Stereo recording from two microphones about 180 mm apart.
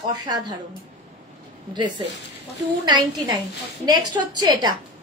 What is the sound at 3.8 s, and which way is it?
Speech, 20° right (ahead or behind).